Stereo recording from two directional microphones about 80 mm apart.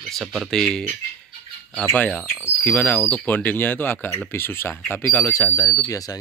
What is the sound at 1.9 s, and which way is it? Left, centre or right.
Speech, left.